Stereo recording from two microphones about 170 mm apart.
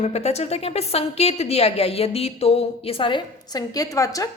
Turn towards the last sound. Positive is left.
turn(degrees=20)  # may be behind; listen again after turning